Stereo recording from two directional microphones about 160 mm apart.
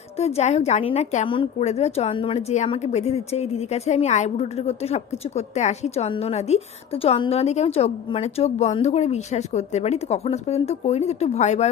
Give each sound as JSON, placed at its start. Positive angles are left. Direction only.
{"t": 0.2, "sound": "a woman's voice", "side_deg": 40}
{"t": 1.3, "sound": "a woman's voice", "side_deg": 30}